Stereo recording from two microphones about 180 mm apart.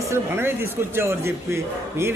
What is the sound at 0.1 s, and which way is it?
Speech, 15° right (ahead or behind).